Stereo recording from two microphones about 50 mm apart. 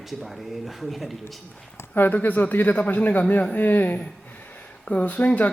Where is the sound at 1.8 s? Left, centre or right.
Left.